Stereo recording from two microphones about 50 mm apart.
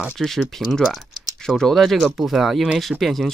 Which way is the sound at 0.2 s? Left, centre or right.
Centre.